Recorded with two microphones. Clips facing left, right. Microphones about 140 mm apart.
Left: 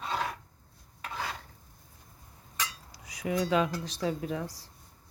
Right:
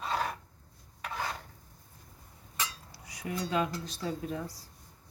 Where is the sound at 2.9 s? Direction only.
90° left.